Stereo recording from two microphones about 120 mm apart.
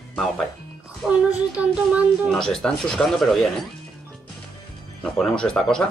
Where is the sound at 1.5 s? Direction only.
10° right (ahead or behind).